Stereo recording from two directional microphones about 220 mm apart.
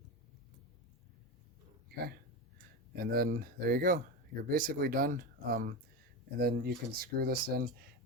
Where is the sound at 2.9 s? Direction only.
45° right (ahead or behind).